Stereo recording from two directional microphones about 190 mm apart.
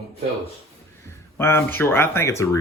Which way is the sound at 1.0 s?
15° left (ahead or behind).